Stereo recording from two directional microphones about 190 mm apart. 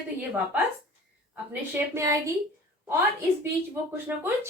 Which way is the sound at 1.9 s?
15° right (ahead or behind).